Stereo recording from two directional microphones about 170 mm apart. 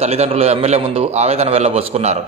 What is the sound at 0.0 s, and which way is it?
A man's voice, 40° right (ahead or behind).